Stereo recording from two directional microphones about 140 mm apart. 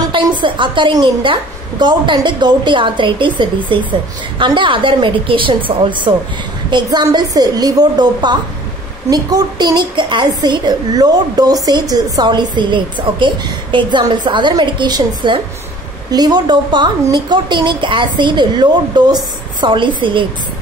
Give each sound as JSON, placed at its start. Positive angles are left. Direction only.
{"t": 0.1, "sound": "a woman's voice", "side_deg": -35}